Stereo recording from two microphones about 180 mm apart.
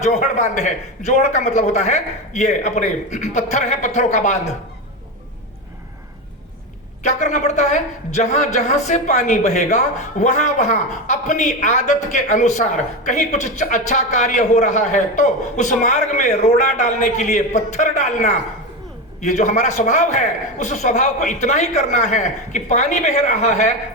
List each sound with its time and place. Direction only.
0.0 s a woman's voice: 40° left (ahead or behind)
7.0 s a woman's voice: 40° left (ahead or behind)